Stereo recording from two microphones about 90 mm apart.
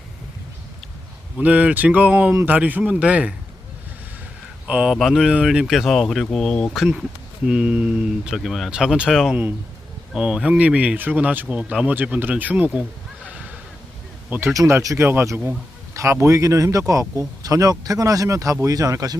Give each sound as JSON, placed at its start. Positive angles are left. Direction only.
{"t": 1.4, "sound": "speech", "side_deg": -15}
{"t": 4.6, "sound": "speech", "side_deg": -10}
{"t": 9.3, "sound": "speech", "side_deg": -20}
{"t": 10.1, "sound": "speech", "side_deg": -5}
{"t": 14.3, "sound": "speech", "side_deg": -20}
{"t": 14.5, "sound": "speech", "side_deg": -40}